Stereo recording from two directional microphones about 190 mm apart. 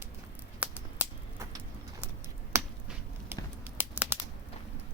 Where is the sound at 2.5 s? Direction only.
15° right (ahead or behind).